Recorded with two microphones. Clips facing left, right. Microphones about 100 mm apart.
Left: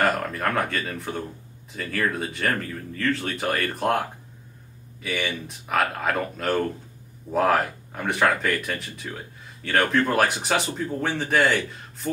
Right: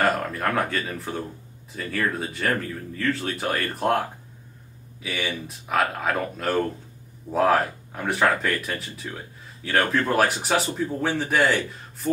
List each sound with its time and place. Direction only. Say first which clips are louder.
0.0 s speech: even; centre (ahead or behind)
5.0 s speech: left 1 dB; centre (ahead or behind)